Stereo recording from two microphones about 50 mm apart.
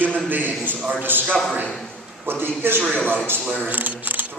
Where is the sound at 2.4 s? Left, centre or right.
Right.